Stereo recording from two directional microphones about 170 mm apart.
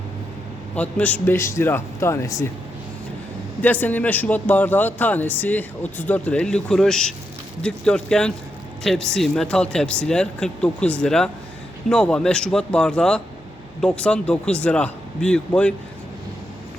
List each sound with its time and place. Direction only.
0.8 s a man's voice: 10° left (ahead or behind)
3.6 s a man's voice: 10° left (ahead or behind)